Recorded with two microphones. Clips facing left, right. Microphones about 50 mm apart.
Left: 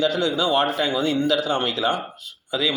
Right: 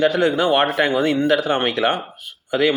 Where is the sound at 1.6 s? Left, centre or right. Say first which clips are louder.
Right 3 dB; right.